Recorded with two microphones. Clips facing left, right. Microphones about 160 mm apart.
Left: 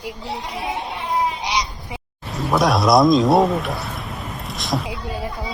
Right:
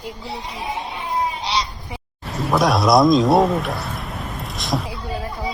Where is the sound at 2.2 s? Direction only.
Centre (ahead or behind).